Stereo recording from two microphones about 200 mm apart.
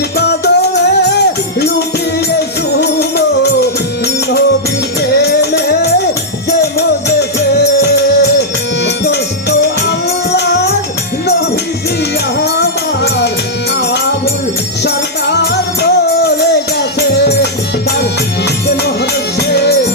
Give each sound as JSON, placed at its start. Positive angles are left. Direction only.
{"t": 0.2, "sound": "music", "side_deg": 55}
{"t": 2.7, "sound": "music", "side_deg": 55}
{"t": 5.1, "sound": "music", "side_deg": 55}
{"t": 12.4, "sound": "music", "side_deg": 55}
{"t": 15.8, "sound": "music", "side_deg": 55}
{"t": 19.4, "sound": "music", "side_deg": 55}